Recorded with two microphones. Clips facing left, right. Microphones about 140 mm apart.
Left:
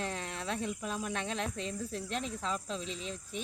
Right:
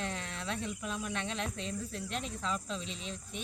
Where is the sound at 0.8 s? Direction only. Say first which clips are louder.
Left 1 dB; 40° left (ahead or behind).